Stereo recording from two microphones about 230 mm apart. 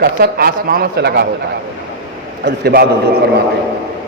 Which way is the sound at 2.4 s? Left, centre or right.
Right.